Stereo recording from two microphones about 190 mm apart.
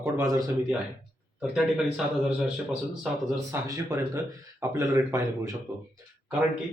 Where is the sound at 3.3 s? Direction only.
15° right (ahead or behind).